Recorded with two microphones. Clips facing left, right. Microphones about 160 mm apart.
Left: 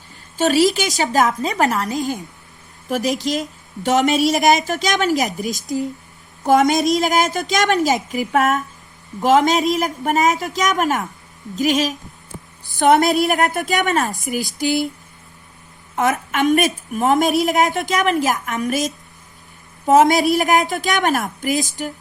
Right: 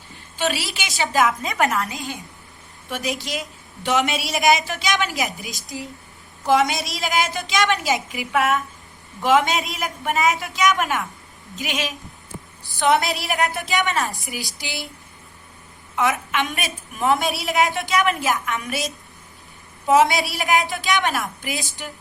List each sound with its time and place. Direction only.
0.3 s a woman's voice: 40° left (ahead or behind)
16.0 s a woman's voice: 45° left (ahead or behind)